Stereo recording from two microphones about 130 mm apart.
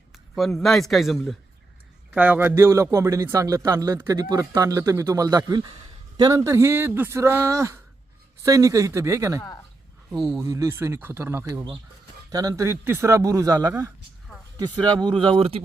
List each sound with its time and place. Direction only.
0.3 s a man's voice: centre (ahead or behind)
2.0 s a man's voice: 10° right (ahead or behind); by 13.7 s 25° right (ahead or behind)
13.7 s speech: 15° right (ahead or behind)
14.6 s speech: 35° right (ahead or behind)